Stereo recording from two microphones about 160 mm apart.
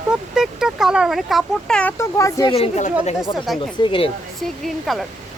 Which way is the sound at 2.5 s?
35° left (ahead or behind).